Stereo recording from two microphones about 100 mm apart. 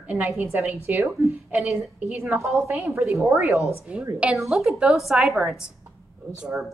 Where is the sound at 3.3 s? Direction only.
5° right (ahead or behind).